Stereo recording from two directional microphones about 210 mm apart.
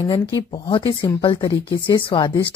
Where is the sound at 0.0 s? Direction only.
20° left (ahead or behind).